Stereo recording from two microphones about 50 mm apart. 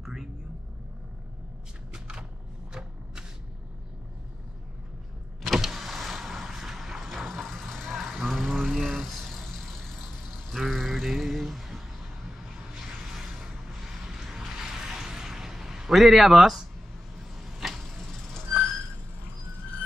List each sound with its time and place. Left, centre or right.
0.0 s vehicle: centre
1.9 s a sound: centre
5.4 s power windows: centre
7.2 s vehicle: centre
13.1 s a sound: centre
17.4 s arrow: centre